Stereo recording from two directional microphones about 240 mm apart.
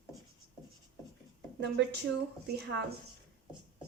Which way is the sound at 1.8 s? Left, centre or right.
Right.